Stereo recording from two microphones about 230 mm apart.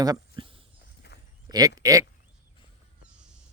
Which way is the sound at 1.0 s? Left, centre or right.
Left.